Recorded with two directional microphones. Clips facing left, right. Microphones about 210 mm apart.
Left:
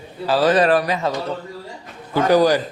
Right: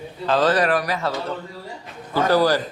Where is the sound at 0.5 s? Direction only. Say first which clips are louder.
Left 4 dB; 25° left (ahead or behind).